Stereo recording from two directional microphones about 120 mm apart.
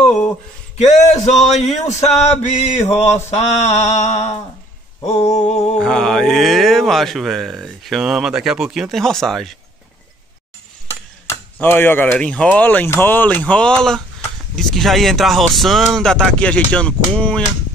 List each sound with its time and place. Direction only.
0.7 s male singing: 70° left (ahead or behind)
3.3 s mantra: 65° left (ahead or behind)
5.8 s speech: 5° left (ahead or behind)
11.6 s speech: 15° left (ahead or behind)